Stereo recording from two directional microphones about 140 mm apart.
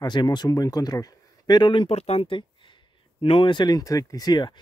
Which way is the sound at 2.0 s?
45° left (ahead or behind).